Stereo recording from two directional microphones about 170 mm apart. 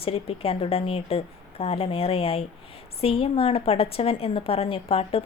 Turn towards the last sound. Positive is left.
turn(degrees=35)  # may be behind; listen again after turning